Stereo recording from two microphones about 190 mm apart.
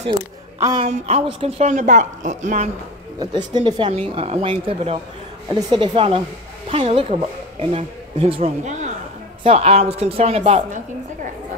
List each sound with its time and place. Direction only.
0.6 s a woman's voice: 15° right (ahead or behind)
0.8 s a woman's voice: 35° right (ahead or behind)
3.2 s a woman's voice: 20° right (ahead or behind)